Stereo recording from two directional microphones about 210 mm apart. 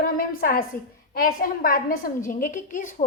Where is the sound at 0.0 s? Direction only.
40° left (ahead or behind).